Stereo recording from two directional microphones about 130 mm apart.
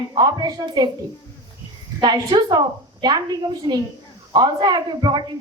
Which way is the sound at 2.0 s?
35° right (ahead or behind).